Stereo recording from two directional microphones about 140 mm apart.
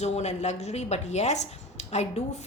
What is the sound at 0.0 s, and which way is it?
Speech, 55° left (ahead or behind).